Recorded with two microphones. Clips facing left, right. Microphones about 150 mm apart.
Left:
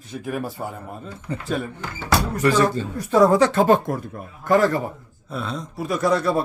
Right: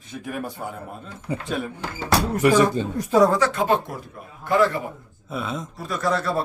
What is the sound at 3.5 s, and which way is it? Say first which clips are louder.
Speech: left 5 dB; 45° left (ahead or behind).